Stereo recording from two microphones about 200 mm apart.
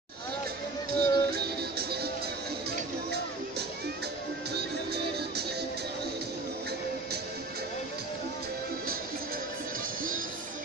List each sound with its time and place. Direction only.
0.9 s music: 55° right (ahead or behind)
4.6 s music: 55° right (ahead or behind)